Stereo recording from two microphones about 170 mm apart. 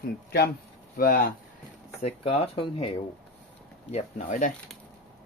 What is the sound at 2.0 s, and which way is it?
Speech, 40° left (ahead or behind).